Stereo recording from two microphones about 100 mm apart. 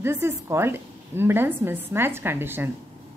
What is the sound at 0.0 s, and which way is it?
A woman's voice, 30° right (ahead or behind).